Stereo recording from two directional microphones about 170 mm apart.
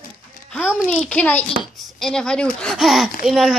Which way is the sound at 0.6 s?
5° right (ahead or behind).